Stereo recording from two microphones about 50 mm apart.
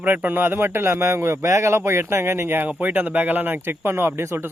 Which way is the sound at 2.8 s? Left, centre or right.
Right.